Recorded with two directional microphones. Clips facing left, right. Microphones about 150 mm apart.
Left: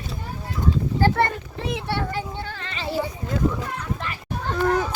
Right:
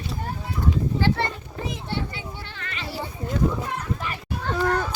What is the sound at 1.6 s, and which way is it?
Speech, 70° left (ahead or behind).